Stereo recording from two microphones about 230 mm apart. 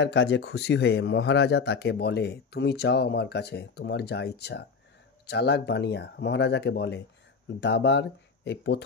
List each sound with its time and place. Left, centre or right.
0.0 s speech: left